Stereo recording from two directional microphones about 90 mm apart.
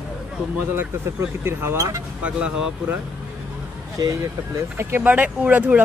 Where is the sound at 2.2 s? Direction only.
15° right (ahead or behind).